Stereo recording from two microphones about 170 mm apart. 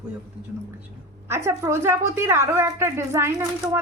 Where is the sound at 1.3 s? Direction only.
15° right (ahead or behind).